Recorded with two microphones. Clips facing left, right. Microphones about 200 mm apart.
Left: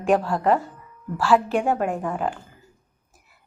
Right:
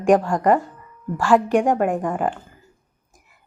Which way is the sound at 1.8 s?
Centre (ahead or behind).